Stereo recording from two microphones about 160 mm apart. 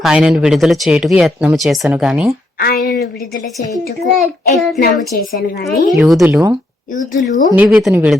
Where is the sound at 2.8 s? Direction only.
70° left (ahead or behind).